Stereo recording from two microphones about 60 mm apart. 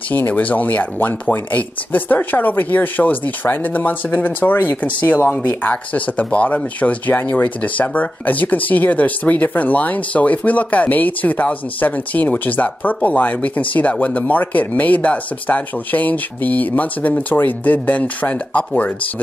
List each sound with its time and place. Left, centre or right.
0.1 s speech: left